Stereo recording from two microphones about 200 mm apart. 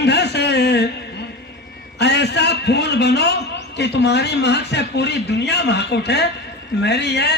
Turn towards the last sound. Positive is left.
turn(degrees=55)  # may be behind; listen again after turning